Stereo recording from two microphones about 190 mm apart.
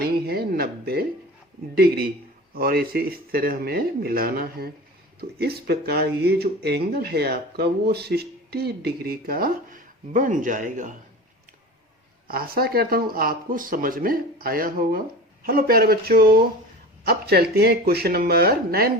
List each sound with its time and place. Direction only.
0.0 s speech: 55° right (ahead or behind)
2.6 s speech: 50° right (ahead or behind)
12.3 s speech: 50° right (ahead or behind)